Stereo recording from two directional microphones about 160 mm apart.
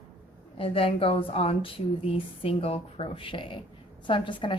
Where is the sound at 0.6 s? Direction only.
35° left (ahead or behind).